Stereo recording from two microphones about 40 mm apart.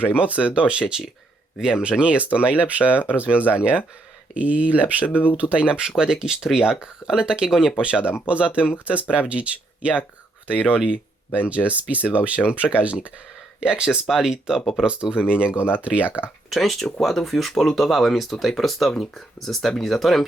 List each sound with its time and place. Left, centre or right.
0.0 s speech: right; by 7.7 s centre
7.8 s speech: right
16.5 s speech: centre